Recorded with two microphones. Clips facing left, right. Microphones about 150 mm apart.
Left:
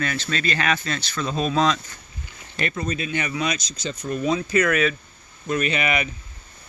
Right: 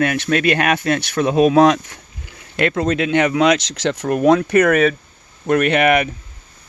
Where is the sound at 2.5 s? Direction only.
75° right (ahead or behind).